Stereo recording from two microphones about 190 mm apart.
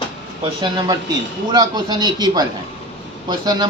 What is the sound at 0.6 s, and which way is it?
Speech, 20° right (ahead or behind).